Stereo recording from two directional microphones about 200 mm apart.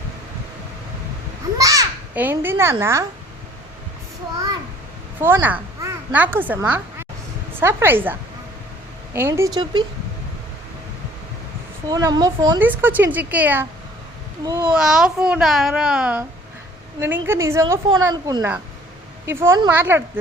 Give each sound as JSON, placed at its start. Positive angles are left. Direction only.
{"t": 1.5, "sound": "goat", "side_deg": -15}
{"t": 5.2, "sound": "a woman's voice", "side_deg": -10}
{"t": 9.1, "sound": "a woman's voice", "side_deg": -10}
{"t": 11.9, "sound": "speech", "side_deg": -20}
{"t": 12.5, "sound": "a woman's voice", "side_deg": -10}
{"t": 14.7, "sound": "a child's voice", "side_deg": 0}